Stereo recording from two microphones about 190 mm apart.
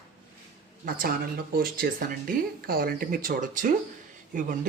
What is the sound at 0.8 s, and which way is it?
Speech, 50° right (ahead or behind).